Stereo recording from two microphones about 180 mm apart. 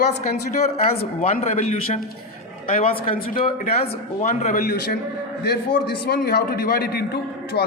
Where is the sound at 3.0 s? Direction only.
55° left (ahead or behind).